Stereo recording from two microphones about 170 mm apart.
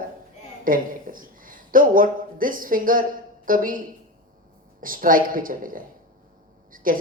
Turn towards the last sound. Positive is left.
turn(degrees=-55)  # may be behind; listen again after turning